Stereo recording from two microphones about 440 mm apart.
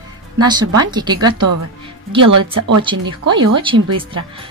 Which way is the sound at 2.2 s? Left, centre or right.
Right.